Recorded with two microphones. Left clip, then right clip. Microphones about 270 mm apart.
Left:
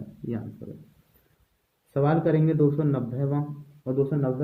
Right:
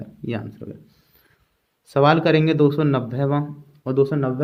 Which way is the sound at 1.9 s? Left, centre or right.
Right.